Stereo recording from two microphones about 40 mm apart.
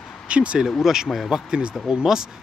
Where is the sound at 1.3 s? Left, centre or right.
Right.